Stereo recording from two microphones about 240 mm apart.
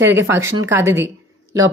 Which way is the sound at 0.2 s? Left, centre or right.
Centre.